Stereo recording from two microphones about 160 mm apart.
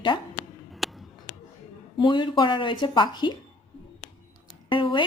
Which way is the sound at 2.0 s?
30° left (ahead or behind).